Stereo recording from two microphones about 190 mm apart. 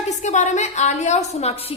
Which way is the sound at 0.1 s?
35° left (ahead or behind).